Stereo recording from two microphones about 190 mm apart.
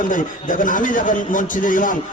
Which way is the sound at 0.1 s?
45° left (ahead or behind).